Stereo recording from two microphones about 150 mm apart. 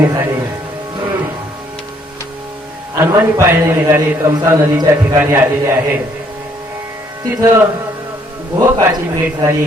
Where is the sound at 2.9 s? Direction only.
20° right (ahead or behind).